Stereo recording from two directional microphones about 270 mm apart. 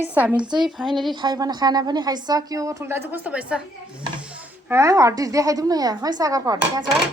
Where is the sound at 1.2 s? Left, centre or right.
Centre.